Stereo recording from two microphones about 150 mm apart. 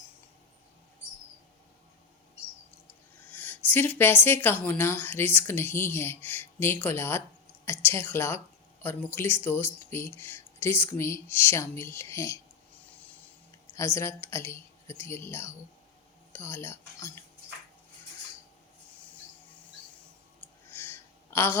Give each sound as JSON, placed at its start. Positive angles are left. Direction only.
{"t": 3.3, "sound": "speech", "side_deg": 10}
{"t": 13.7, "sound": "speech", "side_deg": 20}
{"t": 20.7, "sound": "a sound", "side_deg": 15}